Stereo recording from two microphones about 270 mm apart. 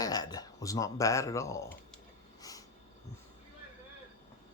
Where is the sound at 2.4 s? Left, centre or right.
Centre.